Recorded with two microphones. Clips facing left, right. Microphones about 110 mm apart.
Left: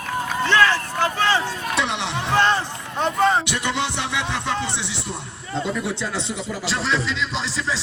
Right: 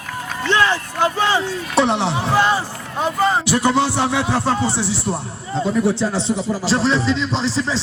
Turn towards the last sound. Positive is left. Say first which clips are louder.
# right 6 dB
turn(degrees=-30)  # may be behind; listen again after turning